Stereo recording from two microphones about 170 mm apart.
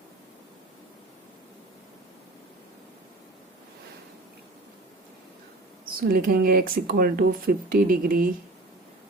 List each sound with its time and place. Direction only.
6.0 s speech: 60° right (ahead or behind)